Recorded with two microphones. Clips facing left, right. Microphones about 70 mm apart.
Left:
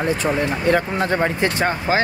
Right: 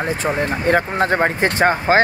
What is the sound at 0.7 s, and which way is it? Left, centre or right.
Speech, right.